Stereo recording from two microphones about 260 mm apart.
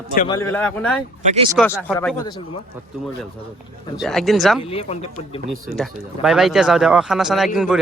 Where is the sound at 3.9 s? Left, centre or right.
Centre.